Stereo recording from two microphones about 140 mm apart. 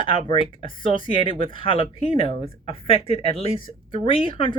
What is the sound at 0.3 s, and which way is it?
Speech, 35° left (ahead or behind).